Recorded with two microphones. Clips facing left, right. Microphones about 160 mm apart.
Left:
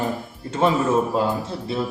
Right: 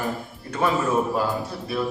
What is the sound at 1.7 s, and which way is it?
Speech, 25° left (ahead or behind).